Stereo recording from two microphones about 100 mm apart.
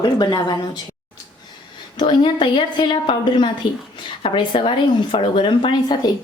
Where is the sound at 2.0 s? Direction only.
50° left (ahead or behind).